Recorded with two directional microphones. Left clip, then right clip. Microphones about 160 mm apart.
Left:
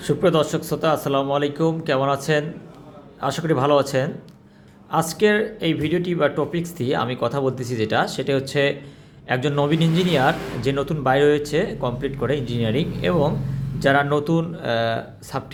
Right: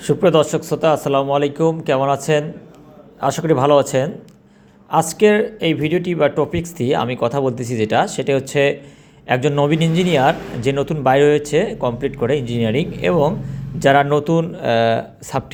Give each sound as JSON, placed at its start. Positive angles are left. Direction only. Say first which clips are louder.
{"t": 0.0, "sound": "a man's voice", "louder": "right 5 dB", "side_deg": -10}